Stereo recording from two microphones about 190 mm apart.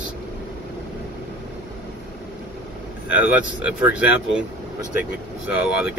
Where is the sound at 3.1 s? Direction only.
5° right (ahead or behind).